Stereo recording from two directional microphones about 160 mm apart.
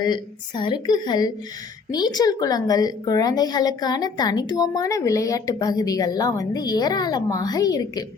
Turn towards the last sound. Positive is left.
turn(degrees=25)  # may be behind; listen again after turning